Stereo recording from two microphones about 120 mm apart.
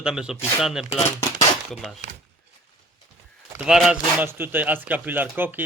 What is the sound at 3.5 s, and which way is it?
Speech, 5° right (ahead or behind).